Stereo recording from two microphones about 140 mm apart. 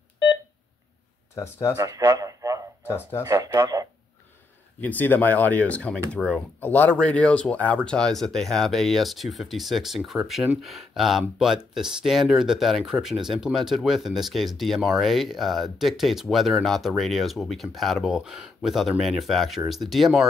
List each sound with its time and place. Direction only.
1.3 s speech: 20° left (ahead or behind)
1.8 s a sound: 20° right (ahead or behind)
3.3 s speech: 25° right (ahead or behind)
4.7 s speech: 10° left (ahead or behind)